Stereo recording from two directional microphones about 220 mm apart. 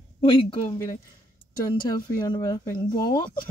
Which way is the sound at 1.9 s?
15° left (ahead or behind).